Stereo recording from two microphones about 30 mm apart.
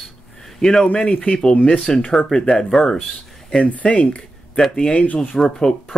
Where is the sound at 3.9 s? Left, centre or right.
Left.